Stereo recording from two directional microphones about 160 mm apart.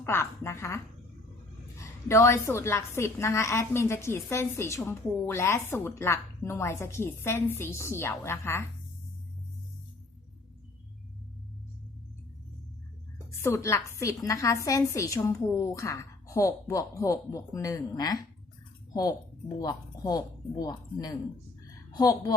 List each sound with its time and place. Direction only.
0.0 s a woman's voice: 15° left (ahead or behind)
2.0 s a woman's voice: 15° left (ahead or behind)
13.4 s a woman's voice: 15° left (ahead or behind)
19.5 s a woman's voice: 25° left (ahead or behind)